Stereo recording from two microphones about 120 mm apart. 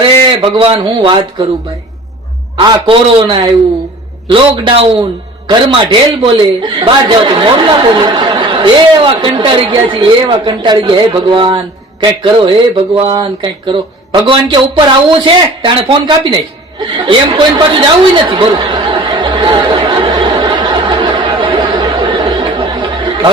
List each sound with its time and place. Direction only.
0.0 s a man's voice: 45° right (ahead or behind)
2.8 s a man's voice: 45° right (ahead or behind)
16.8 s chatter: 40° right (ahead or behind)